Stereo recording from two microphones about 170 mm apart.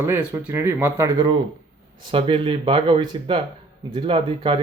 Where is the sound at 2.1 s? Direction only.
30° right (ahead or behind).